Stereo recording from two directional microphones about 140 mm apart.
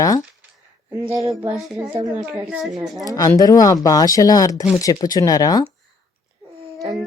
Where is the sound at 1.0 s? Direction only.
20° right (ahead or behind).